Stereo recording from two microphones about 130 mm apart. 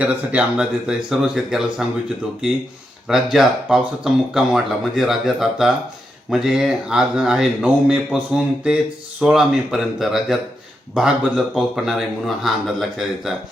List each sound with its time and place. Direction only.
0.0 s speech: 10° right (ahead or behind)
3.1 s speech: 5° right (ahead or behind)